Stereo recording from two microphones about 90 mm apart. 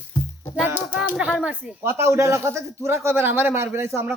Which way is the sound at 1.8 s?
30° right (ahead or behind).